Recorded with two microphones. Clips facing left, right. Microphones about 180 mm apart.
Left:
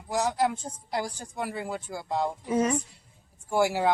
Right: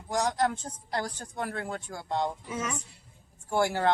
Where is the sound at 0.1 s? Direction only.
5° left (ahead or behind).